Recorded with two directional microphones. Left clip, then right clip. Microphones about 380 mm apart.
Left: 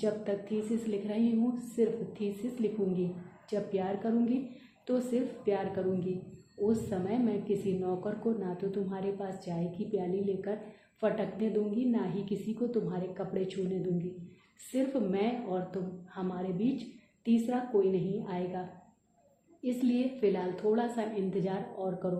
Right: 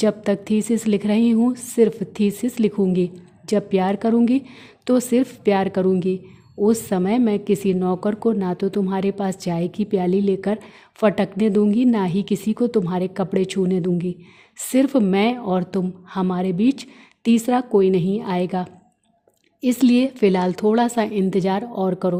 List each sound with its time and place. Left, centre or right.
0.0 s a woman's voice: right
19.6 s a woman's voice: right